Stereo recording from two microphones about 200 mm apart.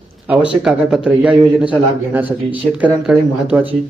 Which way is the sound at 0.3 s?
5° right (ahead or behind).